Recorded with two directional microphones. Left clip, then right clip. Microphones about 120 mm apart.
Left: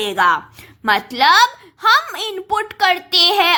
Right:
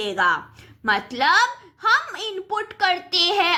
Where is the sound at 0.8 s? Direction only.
45° left (ahead or behind).